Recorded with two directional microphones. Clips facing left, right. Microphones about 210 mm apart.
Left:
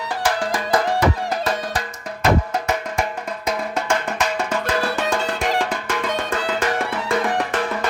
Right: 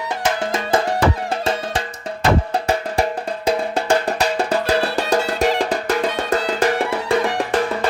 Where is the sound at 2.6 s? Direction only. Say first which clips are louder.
Right 4 dB; 35° right (ahead or behind).